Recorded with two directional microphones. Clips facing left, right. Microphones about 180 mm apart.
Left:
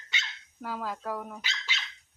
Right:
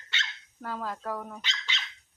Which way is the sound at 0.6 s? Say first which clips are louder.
Even; 5° left (ahead or behind).